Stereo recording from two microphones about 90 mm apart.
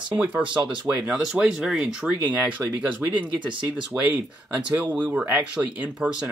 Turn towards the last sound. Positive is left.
turn(degrees=-20)  # may be behind; listen again after turning